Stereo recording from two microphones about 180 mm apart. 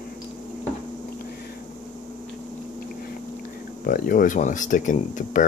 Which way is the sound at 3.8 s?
50° left (ahead or behind).